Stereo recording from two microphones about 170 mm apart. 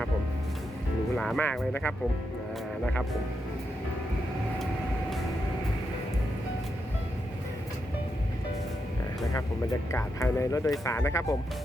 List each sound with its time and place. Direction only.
1.1 s speech: centre (ahead or behind)
9.9 s speech: 15° left (ahead or behind)